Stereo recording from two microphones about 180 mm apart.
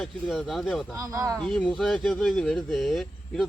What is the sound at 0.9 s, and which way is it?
Speech, 15° right (ahead or behind).